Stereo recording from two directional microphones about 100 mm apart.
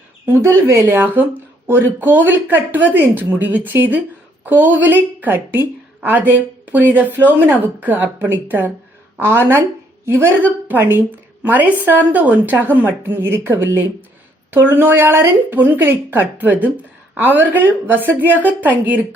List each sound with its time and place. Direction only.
0.3 s a woman's voice: 25° right (ahead or behind)